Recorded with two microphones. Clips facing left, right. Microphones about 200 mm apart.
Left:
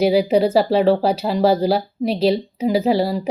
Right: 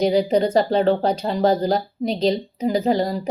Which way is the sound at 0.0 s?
5° left (ahead or behind).